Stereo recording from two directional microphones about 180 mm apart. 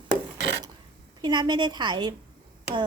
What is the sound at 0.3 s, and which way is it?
Filing, 70° right (ahead or behind).